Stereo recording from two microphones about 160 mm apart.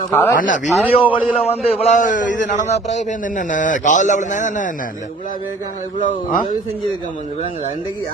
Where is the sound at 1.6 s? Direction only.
40° left (ahead or behind).